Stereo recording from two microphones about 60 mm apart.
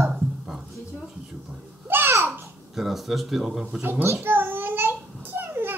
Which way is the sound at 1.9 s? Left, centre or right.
Right.